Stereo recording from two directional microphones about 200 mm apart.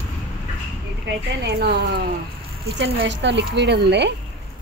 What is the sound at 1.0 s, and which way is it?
Speech, 60° right (ahead or behind).